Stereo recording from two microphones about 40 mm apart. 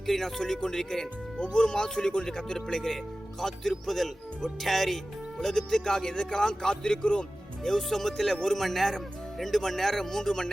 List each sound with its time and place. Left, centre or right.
0.0 s speech: centre; by 7.3 s left
7.6 s speech: centre